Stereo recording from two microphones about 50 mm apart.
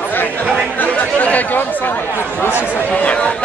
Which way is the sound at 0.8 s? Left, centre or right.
Left.